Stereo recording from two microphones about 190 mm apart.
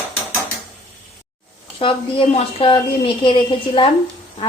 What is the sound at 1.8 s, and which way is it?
A woman's voice, 30° left (ahead or behind).